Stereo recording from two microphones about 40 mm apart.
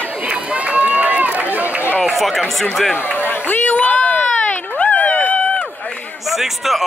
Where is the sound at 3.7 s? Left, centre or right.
Left.